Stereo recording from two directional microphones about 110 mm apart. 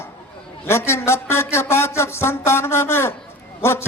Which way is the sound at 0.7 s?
25° left (ahead or behind).